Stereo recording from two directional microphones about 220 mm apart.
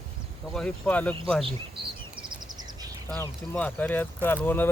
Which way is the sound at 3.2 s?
5° left (ahead or behind).